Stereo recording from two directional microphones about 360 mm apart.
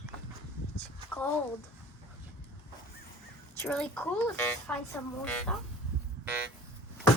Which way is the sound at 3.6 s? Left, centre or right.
Centre.